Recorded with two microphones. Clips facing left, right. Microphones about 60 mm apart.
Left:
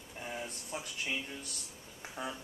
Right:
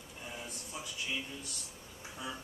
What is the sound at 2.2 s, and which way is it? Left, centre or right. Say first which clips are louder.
Music: left 2 dB; left.